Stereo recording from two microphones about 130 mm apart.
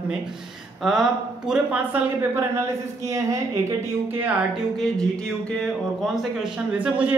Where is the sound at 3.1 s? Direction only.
25° right (ahead or behind).